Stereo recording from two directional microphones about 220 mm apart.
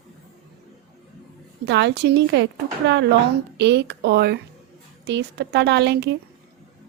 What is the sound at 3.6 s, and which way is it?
A woman's voice, 50° right (ahead or behind).